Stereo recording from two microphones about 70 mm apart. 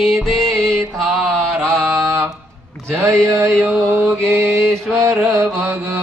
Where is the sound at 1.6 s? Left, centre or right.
Right.